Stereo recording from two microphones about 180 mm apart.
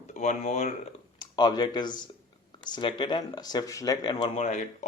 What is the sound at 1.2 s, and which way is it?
Speech, 25° left (ahead or behind).